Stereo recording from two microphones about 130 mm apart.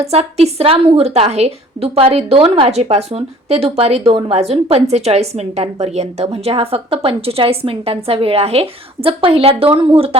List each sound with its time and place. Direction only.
0.0 s speech: 55° right (ahead or behind)